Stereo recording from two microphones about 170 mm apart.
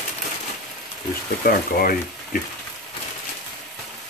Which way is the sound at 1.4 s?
55° left (ahead or behind).